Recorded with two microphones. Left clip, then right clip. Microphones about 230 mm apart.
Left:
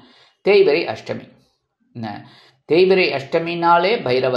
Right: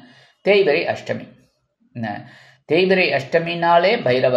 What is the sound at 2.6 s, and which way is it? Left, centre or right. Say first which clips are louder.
Speech: left 2 dB; centre.